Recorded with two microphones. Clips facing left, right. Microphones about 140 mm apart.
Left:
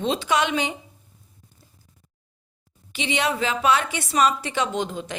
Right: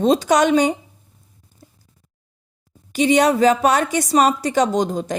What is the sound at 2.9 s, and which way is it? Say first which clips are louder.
A woman's voice: right 10 dB; 45° right (ahead or behind).